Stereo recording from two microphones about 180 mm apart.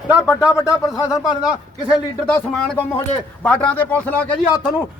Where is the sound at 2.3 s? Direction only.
5° left (ahead or behind).